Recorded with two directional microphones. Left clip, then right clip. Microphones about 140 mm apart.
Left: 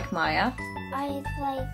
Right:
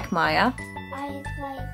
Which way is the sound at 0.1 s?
65° right (ahead or behind).